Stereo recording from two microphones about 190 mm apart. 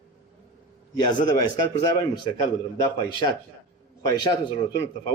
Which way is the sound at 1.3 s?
20° left (ahead or behind).